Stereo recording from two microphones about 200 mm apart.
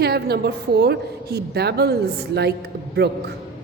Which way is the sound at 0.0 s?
55° right (ahead or behind).